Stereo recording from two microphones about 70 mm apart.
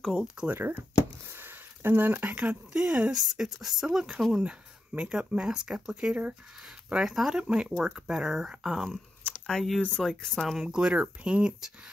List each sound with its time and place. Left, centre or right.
0.0 s speech: centre
0.5 s speech: right
1.3 s a sound: right
2.3 s speech: centre
9.2 s a sound: centre
9.9 s speech: centre
10.6 s speech: centre